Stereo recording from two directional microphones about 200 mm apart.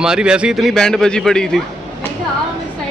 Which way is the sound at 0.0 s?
5° right (ahead or behind).